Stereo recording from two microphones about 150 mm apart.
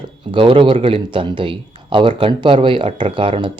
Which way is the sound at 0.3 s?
35° right (ahead or behind).